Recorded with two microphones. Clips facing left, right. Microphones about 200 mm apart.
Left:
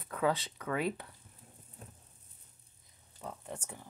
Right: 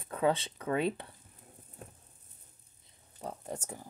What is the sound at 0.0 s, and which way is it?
Speech, 25° right (ahead or behind).